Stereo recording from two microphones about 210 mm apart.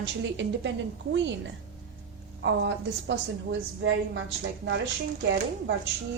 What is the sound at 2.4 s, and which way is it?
Speech, 60° right (ahead or behind).